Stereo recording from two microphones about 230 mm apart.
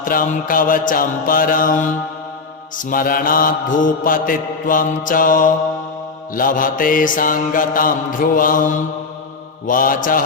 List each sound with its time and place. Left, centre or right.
0.0 s mantra: left